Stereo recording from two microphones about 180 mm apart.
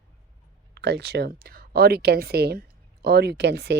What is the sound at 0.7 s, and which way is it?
Speech, 70° right (ahead or behind).